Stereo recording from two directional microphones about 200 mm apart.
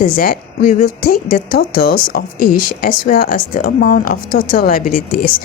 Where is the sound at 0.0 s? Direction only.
45° left (ahead or behind).